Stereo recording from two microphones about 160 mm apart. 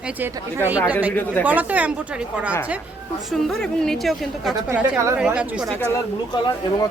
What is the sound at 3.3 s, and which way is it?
A woman's voice, 5° left (ahead or behind).